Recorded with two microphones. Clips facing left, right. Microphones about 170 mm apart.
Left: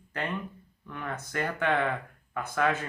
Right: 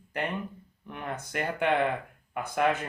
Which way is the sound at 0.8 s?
25° right (ahead or behind).